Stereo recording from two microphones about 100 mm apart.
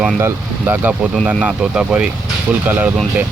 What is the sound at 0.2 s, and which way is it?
Speech, 25° right (ahead or behind).